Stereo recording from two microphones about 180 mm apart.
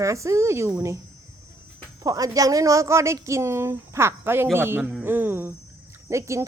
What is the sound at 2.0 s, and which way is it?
A woman's voice, 20° right (ahead or behind).